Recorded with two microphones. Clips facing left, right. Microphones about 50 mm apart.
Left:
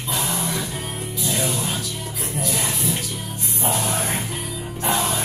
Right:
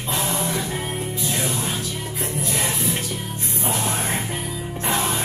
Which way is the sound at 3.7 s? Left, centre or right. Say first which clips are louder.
Even; right.